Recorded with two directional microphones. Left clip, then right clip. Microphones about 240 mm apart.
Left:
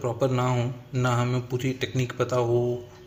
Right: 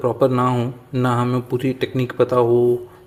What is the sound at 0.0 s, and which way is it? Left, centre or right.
A man's voice, right.